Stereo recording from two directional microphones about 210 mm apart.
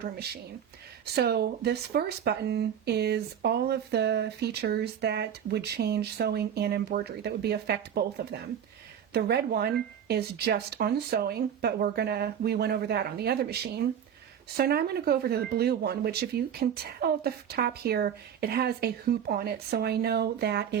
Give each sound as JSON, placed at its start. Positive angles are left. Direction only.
{"t": 1.0, "sound": "speech", "side_deg": -50}